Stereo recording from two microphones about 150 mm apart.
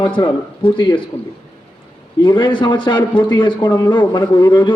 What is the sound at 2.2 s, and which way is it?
A man's voice, 30° left (ahead or behind).